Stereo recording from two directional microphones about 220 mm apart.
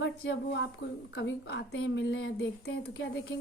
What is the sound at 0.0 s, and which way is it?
A woman's voice, 55° left (ahead or behind).